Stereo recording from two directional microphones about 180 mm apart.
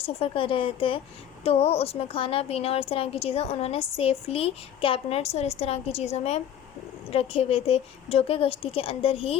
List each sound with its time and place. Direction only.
0.0 s a woman's voice: 30° left (ahead or behind)